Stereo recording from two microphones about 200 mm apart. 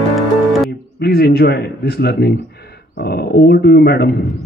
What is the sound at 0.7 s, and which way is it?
Speech, 55° left (ahead or behind).